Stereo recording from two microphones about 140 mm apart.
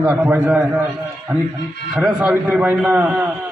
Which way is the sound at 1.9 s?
5° right (ahead or behind).